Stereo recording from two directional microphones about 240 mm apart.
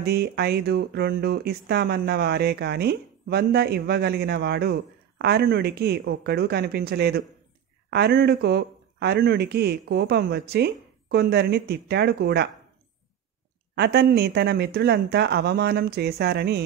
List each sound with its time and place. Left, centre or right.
0.0 s speech: right
13.7 s speech: right